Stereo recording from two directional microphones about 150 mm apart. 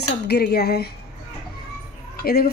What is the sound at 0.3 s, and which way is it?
Speech, 90° left.